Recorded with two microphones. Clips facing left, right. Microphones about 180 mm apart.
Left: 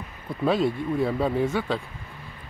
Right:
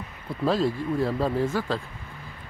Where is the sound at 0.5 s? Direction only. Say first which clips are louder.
Left 1 dB; centre (ahead or behind).